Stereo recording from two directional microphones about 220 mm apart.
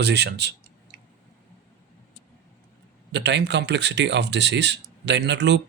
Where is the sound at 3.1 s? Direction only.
50° right (ahead or behind).